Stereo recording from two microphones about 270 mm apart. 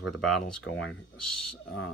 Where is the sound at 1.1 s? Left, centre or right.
Left.